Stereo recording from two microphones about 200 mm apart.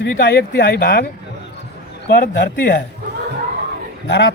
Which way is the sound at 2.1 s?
50° left (ahead or behind).